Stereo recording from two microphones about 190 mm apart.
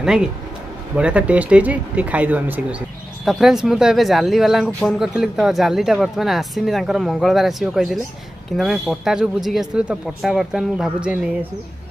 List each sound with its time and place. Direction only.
0.0 s speech: 5° right (ahead or behind)